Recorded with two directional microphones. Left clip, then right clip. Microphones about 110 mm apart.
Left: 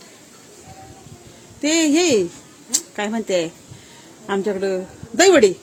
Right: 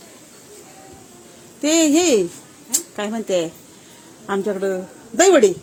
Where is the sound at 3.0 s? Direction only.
20° left (ahead or behind).